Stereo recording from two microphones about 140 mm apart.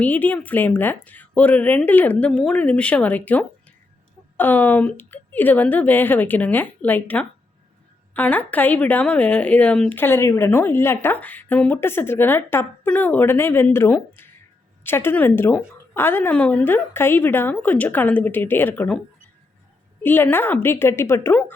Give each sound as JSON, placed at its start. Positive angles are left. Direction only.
{"t": 0.0, "sound": "speech", "side_deg": 10}
{"t": 20.0, "sound": "speech", "side_deg": 15}